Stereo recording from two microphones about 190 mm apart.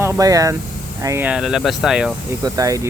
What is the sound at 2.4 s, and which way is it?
Speech, 20° right (ahead or behind).